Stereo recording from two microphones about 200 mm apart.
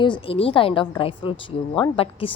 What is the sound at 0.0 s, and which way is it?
A woman's voice, 25° left (ahead or behind).